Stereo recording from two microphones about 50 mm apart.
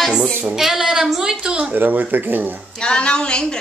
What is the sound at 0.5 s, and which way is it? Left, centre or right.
A woman's voice, centre.